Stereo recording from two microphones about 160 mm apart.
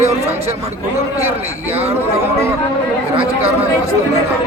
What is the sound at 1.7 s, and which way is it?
Speech, 40° right (ahead or behind).